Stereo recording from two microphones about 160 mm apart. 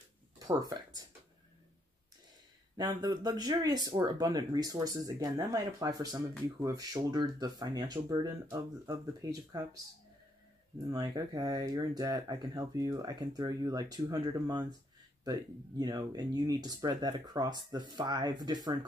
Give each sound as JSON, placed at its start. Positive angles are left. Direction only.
{"t": 0.4, "sound": "speech", "side_deg": -25}
{"t": 2.8, "sound": "speech", "side_deg": -25}
{"t": 10.9, "sound": "speech", "side_deg": -20}
{"t": 15.8, "sound": "speech", "side_deg": -25}